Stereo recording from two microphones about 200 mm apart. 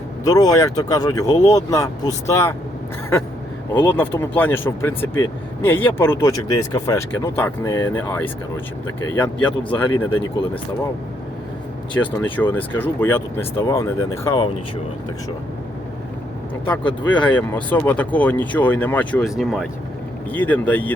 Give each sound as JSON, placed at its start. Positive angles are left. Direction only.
{"t": 0.3, "sound": "speech", "side_deg": 15}
{"t": 3.8, "sound": "speech", "side_deg": 10}
{"t": 11.9, "sound": "speech", "side_deg": 10}
{"t": 16.6, "sound": "speech", "side_deg": 5}